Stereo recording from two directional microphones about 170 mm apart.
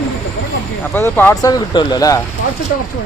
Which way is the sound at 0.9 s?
10° left (ahead or behind).